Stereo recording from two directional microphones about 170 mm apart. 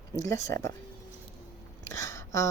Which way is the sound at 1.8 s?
20° left (ahead or behind).